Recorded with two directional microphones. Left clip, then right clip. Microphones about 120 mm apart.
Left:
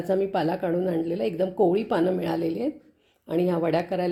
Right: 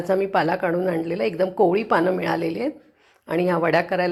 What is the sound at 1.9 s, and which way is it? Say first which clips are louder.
A woman's voice: right 4 dB; 20° left (ahead or behind).